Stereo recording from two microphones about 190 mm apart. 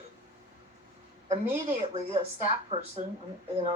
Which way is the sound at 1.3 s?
30° right (ahead or behind).